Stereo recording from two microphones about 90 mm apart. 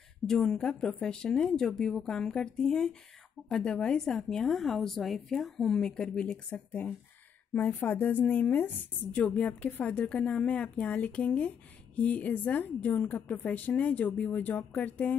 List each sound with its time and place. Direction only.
0.3 s a woman's voice: 5° left (ahead or behind)